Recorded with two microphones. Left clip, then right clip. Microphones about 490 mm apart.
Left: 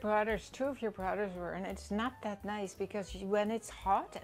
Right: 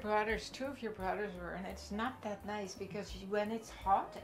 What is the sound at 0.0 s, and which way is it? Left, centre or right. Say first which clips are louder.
Speech: left 2 dB; left.